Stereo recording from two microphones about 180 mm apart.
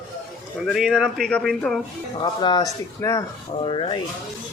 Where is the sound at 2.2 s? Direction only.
25° left (ahead or behind).